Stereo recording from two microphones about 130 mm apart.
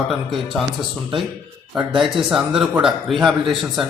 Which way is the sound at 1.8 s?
5° right (ahead or behind).